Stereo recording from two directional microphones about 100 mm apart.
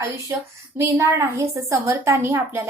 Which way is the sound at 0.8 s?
30° right (ahead or behind).